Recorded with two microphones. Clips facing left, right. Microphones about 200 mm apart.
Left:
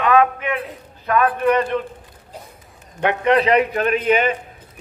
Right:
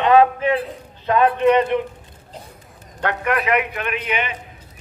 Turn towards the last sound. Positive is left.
turn(degrees=40)  # may be behind; listen again after turning